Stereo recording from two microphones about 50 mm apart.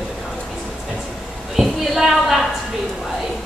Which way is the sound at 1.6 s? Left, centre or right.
Centre.